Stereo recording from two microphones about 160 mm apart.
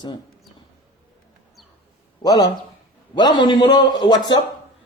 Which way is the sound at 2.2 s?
25° left (ahead or behind).